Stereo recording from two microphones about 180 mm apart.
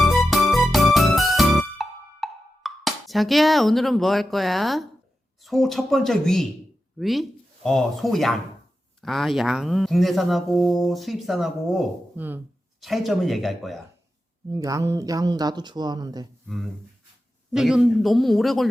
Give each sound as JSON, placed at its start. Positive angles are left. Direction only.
{"t": 0.0, "sound": "music", "side_deg": 0}
{"t": 5.4, "sound": "speech", "side_deg": 0}
{"t": 14.5, "sound": "speech", "side_deg": -20}
{"t": 17.5, "sound": "speech", "side_deg": -5}